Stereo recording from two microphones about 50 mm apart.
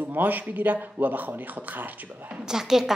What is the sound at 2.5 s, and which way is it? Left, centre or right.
Speech, centre.